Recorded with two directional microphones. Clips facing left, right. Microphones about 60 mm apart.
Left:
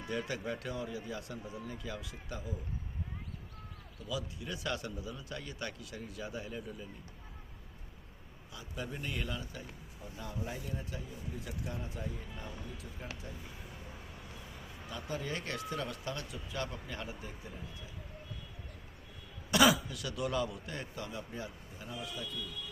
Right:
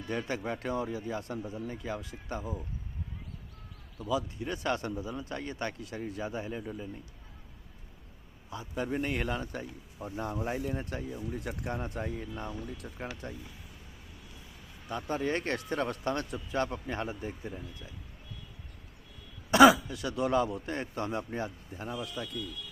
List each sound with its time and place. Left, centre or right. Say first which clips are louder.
0.1 s a man's voice: right 3 dB; right
3.9 s a man's voice: right 8 dB; right
8.4 s a man's voice: right 8 dB; right
14.8 s a man's voice: right 7 dB; right
19.5 s a man's voice: right 8 dB; right